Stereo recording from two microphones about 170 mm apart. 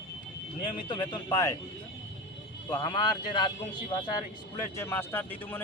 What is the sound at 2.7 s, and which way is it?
Speech, 25° left (ahead or behind).